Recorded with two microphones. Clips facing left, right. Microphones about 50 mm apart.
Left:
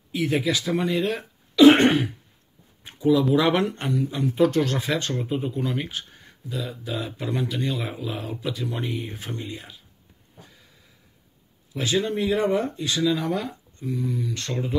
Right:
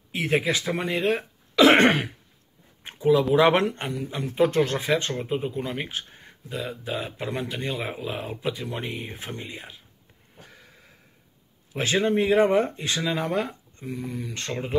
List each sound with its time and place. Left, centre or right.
0.1 s speech: right
1.6 s throat clearing: right
2.8 s speech: right
3.7 s speech: centre
4.4 s speech: right
6.5 s speech: right
7.2 s speech: right
11.7 s speech: right